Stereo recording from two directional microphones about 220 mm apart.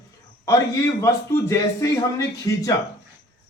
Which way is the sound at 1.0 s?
10° left (ahead or behind).